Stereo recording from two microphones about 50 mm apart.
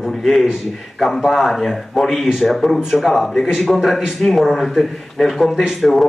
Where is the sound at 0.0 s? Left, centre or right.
Centre.